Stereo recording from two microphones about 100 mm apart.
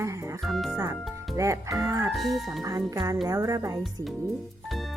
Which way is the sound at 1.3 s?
30° right (ahead or behind).